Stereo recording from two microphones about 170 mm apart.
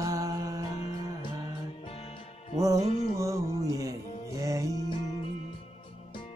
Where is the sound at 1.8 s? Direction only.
35° left (ahead or behind).